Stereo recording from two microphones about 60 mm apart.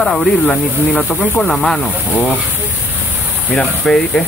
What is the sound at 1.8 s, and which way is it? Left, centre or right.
Speech, left.